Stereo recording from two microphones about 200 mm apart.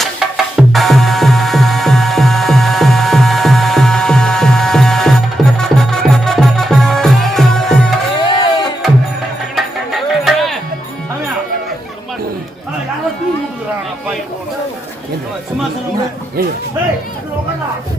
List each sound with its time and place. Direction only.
0.5 s music: centre (ahead or behind)
8.2 s music: 25° left (ahead or behind)
9.6 s music: centre (ahead or behind)